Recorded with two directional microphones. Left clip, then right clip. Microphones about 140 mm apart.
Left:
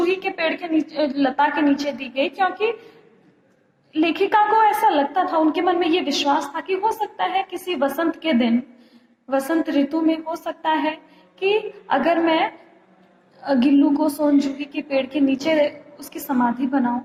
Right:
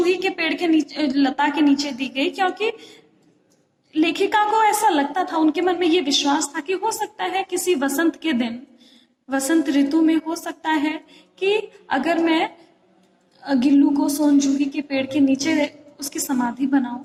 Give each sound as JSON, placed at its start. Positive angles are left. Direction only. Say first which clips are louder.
{"t": 0.0, "sound": "a woman's voice", "louder": "right 1 dB", "side_deg": -25}
{"t": 3.9, "sound": "a woman's voice", "louder": "left 1 dB", "side_deg": -25}